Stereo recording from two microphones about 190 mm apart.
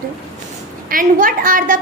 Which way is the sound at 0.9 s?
45° right (ahead or behind).